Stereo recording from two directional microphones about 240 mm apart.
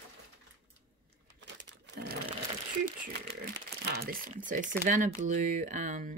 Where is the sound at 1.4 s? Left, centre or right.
Right.